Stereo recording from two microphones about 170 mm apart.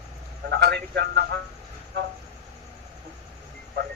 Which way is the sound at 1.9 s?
85° right.